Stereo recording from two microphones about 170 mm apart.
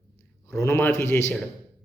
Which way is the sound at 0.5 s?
15° left (ahead or behind).